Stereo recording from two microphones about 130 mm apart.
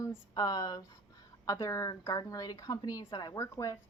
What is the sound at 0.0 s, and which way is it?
Speech, 30° left (ahead or behind).